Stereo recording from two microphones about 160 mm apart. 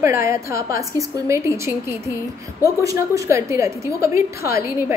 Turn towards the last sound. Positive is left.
turn(degrees=-15)  # may be behind; listen again after turning